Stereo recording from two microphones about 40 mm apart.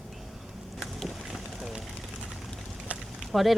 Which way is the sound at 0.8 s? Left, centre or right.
Centre.